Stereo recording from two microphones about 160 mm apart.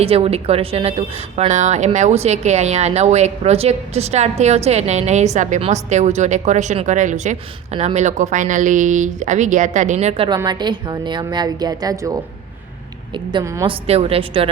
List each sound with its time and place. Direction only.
0.0 s speech: 40° right (ahead or behind)
10.2 s a woman's voice: 25° right (ahead or behind)
13.4 s a woman's voice: 20° right (ahead or behind)
13.7 s a woman's voice: 40° right (ahead or behind)